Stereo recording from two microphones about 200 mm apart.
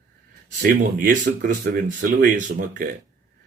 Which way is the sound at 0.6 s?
45° right (ahead or behind).